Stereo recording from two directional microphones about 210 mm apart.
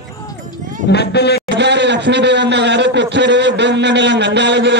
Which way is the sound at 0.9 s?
50° left (ahead or behind).